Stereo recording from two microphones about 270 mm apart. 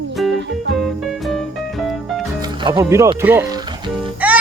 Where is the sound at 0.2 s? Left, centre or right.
Centre.